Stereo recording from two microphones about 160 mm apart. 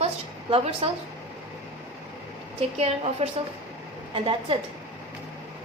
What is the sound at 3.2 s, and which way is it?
Speech, 40° right (ahead or behind).